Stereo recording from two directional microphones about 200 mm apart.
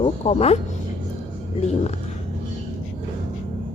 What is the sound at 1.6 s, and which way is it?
Speech, 35° left (ahead or behind).